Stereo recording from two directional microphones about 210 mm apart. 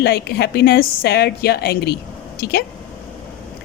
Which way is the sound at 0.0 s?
50° left (ahead or behind).